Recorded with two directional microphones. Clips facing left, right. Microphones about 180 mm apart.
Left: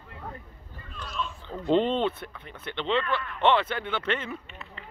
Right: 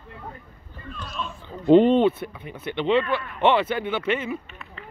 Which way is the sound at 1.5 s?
10° right (ahead or behind).